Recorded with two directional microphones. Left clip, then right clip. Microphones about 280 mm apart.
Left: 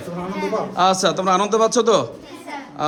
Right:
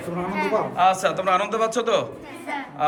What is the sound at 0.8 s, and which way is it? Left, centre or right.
Speech, centre.